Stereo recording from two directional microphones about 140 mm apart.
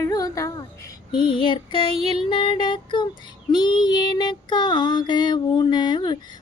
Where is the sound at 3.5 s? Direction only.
35° left (ahead or behind).